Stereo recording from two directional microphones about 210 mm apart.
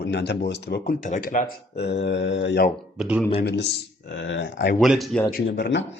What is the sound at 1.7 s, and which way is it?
Mantra, 50° left (ahead or behind).